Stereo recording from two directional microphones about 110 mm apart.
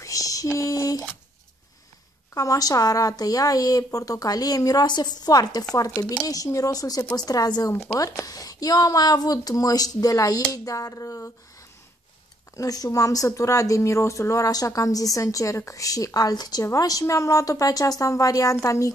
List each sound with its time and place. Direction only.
0.0 s a sound: 30° left (ahead or behind)
0.6 s speech: 30° left (ahead or behind)
2.3 s speech: 30° left (ahead or behind)
12.5 s speech: 35° left (ahead or behind)